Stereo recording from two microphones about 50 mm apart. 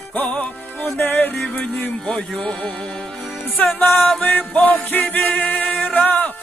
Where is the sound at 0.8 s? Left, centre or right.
Left.